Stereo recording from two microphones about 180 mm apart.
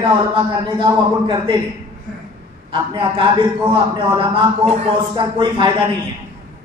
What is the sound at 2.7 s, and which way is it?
A man's voice, 25° right (ahead or behind).